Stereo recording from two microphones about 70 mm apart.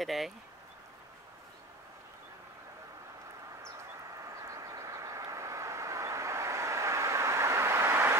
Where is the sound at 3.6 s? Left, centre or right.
Right.